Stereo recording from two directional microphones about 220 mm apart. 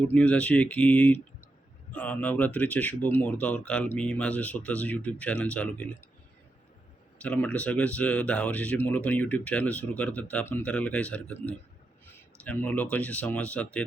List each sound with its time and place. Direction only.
0.1 s speech: 5° left (ahead or behind)
7.2 s speech: 5° left (ahead or behind)
12.4 s speech: 5° left (ahead or behind)